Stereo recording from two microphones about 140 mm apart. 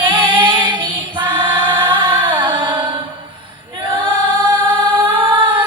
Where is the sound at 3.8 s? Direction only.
35° right (ahead or behind).